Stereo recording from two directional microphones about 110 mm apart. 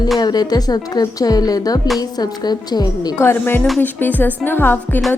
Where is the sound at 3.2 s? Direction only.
20° left (ahead or behind).